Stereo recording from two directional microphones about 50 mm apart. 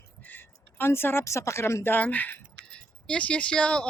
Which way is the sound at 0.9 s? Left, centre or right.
Left.